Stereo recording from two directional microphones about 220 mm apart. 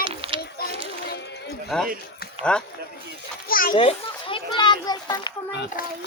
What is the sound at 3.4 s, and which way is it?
Children playing, 40° left (ahead or behind).